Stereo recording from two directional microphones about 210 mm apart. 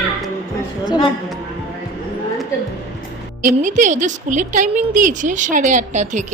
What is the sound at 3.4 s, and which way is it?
A woman's voice, 35° right (ahead or behind).